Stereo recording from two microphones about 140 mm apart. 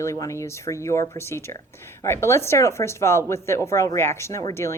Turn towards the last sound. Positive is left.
turn(degrees=20)  # may be behind; listen again after turning